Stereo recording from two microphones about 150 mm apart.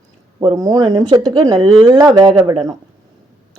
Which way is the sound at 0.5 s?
20° right (ahead or behind).